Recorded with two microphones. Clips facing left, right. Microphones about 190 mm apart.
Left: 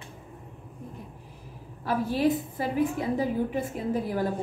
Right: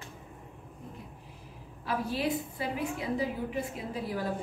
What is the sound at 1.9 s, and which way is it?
A woman's voice, 50° left (ahead or behind).